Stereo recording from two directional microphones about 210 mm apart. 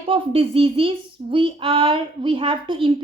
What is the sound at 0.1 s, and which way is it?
Speech, 25° right (ahead or behind).